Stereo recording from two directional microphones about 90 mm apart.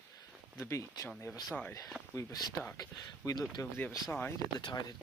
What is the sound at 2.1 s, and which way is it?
Speech, 35° left (ahead or behind).